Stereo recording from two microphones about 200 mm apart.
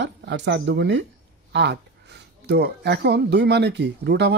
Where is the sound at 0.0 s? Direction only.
60° right (ahead or behind).